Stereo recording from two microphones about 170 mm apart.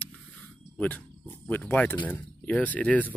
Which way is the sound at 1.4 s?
10° left (ahead or behind).